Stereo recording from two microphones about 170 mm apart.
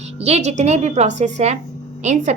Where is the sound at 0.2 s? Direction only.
40° right (ahead or behind).